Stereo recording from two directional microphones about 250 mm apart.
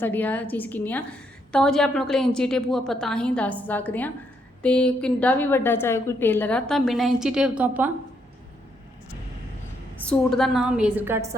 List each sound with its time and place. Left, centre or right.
0.0 s a woman's voice: centre
10.0 s a woman's voice: centre